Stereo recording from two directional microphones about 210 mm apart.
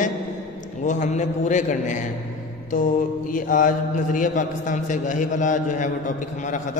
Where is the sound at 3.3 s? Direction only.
40° left (ahead or behind).